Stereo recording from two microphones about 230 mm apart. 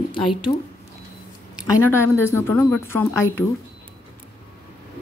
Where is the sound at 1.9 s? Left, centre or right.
Centre.